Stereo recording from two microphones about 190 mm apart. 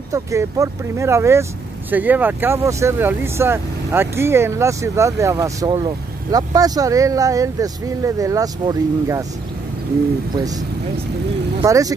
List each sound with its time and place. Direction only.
0.1 s speech: 15° right (ahead or behind)
10.3 s speech: 20° right (ahead or behind)
11.6 s speech: 20° right (ahead or behind)